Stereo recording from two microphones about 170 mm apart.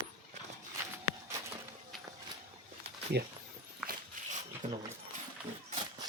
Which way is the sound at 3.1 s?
75° right (ahead or behind).